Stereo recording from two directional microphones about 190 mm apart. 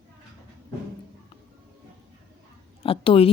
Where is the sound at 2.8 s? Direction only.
30° left (ahead or behind).